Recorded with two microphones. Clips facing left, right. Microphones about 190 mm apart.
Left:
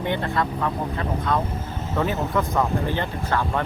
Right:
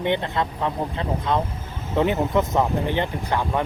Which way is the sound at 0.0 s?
20° right (ahead or behind).